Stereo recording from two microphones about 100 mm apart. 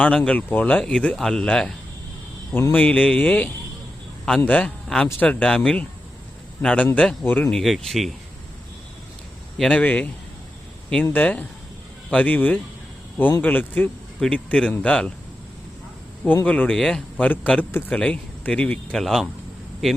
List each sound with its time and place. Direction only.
0.0 s speech: 15° left (ahead or behind)
2.7 s speech: 15° left (ahead or behind)
7.5 s speech: 5° left (ahead or behind)
9.6 s speech: 10° left (ahead or behind)
16.2 s speech: 15° left (ahead or behind)
17.9 s speech: 10° left (ahead or behind)